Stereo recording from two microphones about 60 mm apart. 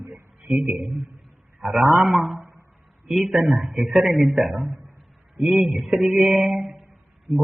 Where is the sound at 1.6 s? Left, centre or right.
Centre.